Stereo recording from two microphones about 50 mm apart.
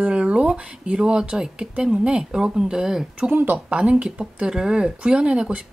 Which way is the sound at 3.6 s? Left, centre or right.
Right.